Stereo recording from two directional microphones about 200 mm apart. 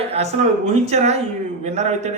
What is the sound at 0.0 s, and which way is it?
Speech, 30° right (ahead or behind).